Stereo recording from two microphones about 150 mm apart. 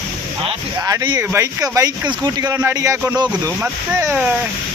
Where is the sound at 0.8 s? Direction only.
25° right (ahead or behind).